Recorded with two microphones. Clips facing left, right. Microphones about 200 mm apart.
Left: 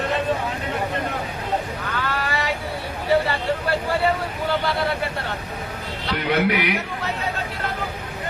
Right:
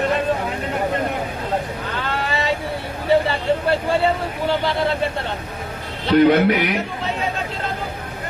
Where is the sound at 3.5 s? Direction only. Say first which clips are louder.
Right 6 dB; 25° right (ahead or behind).